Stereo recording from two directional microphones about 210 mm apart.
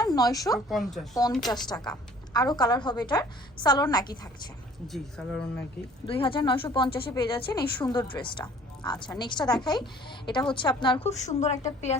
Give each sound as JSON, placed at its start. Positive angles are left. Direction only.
{"t": 0.0, "sound": "speech", "side_deg": 20}
{"t": 0.7, "sound": "speech", "side_deg": 0}
{"t": 1.5, "sound": "speech", "side_deg": 20}
{"t": 4.9, "sound": "speech", "side_deg": 5}
{"t": 6.1, "sound": "a woman's voice", "side_deg": 25}